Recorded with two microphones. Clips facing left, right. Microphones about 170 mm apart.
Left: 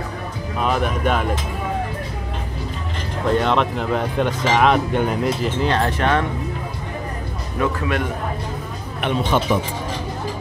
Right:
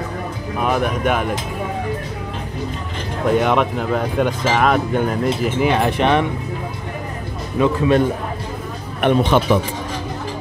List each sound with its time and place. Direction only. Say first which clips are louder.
0.6 s speech: right 2 dB; 10° right (ahead or behind)
3.3 s speech: right 2 dB; 10° right (ahead or behind)
5.6 s speech: right 4 dB; 15° right (ahead or behind)
7.5 s speech: right 6 dB; 20° right (ahead or behind)
9.0 s speech: right 7 dB; 50° right (ahead or behind)